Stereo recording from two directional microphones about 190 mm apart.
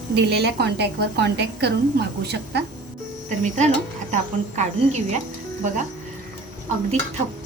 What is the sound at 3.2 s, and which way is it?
Speech, 40° right (ahead or behind).